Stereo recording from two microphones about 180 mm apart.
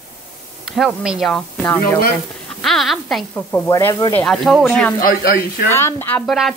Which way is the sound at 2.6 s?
Centre (ahead or behind).